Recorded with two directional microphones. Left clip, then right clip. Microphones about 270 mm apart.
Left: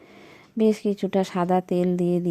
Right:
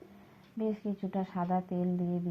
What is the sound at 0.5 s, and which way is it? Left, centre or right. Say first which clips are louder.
A woman's voice: left 14 dB; left.